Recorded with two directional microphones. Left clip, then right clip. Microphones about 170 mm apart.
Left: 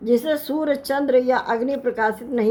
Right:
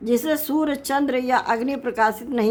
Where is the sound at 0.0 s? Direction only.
25° right (ahead or behind).